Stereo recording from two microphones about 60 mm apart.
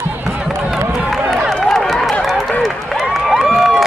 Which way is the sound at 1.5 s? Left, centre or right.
Centre.